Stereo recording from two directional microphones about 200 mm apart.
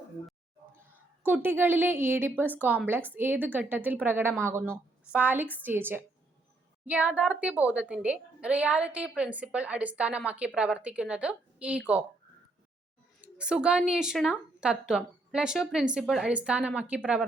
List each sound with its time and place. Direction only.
0.9 s a woman's voice: 10° right (ahead or behind)
13.2 s a woman's voice: 5° right (ahead or behind)